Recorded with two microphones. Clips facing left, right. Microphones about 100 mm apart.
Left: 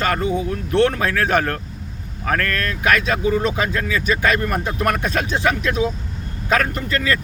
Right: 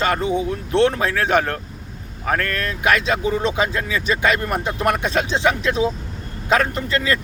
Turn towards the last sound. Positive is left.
turn(degrees=-25)  # may be behind; listen again after turning